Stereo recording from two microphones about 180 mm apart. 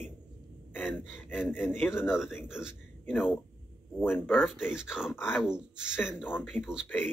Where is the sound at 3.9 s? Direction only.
10° left (ahead or behind).